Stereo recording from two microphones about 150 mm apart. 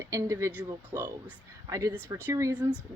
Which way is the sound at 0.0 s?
20° right (ahead or behind).